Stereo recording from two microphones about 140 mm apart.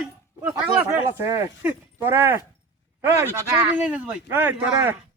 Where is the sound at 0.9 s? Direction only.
20° right (ahead or behind).